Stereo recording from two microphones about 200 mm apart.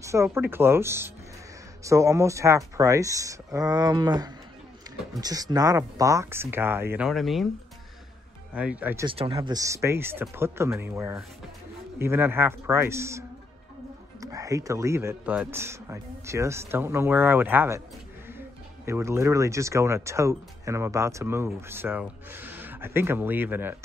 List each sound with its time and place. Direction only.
0.0 s speech: 15° right (ahead or behind)
8.5 s speech: 5° right (ahead or behind)
9.0 s speech: 30° right (ahead or behind)
14.2 s speech: 15° right (ahead or behind)
18.9 s speech: 15° right (ahead or behind)